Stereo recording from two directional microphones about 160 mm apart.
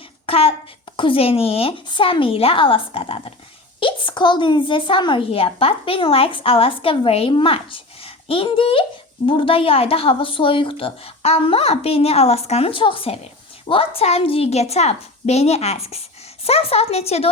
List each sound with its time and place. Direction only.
0.3 s a woman's voice: 35° left (ahead or behind)